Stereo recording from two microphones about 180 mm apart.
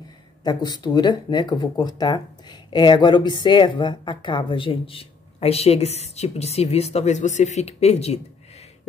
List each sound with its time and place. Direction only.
0.4 s speech: 25° left (ahead or behind)